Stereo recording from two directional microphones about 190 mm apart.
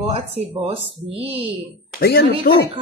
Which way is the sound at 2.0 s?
55° left (ahead or behind).